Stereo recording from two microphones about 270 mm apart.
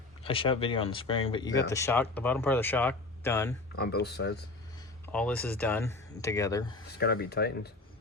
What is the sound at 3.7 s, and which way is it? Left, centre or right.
Speech, left.